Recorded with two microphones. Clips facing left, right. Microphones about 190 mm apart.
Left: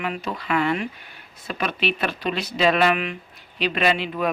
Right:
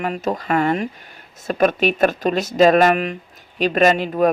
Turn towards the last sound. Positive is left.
turn(degrees=-45)  # may be behind; listen again after turning